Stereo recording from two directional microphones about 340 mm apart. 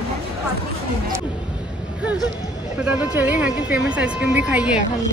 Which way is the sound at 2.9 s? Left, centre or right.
Centre.